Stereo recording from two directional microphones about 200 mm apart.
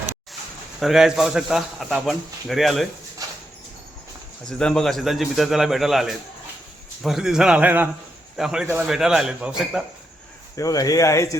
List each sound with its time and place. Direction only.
0.8 s a man's voice: centre (ahead or behind)
3.2 s a sound: 15° right (ahead or behind)
4.4 s a man's voice: 5° left (ahead or behind)
10.5 s speech: 15° left (ahead or behind)